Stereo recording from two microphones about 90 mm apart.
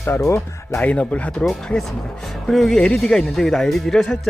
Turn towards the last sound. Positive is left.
turn(degrees=5)  # may be behind; listen again after turning